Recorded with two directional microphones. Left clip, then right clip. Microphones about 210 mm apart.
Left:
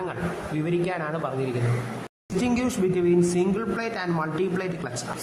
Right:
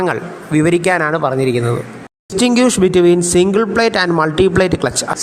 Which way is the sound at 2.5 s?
40° right (ahead or behind).